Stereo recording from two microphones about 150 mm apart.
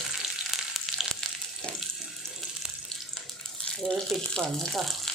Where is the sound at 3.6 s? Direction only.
5° left (ahead or behind).